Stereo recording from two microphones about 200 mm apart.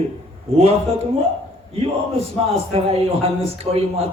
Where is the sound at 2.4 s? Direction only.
30° right (ahead or behind).